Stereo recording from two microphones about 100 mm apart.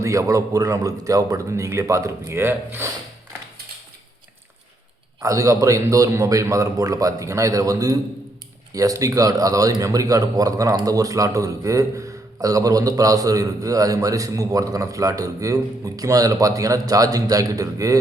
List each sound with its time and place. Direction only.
0.0 s a man's voice: 35° right (ahead or behind)
5.2 s a man's voice: 35° right (ahead or behind)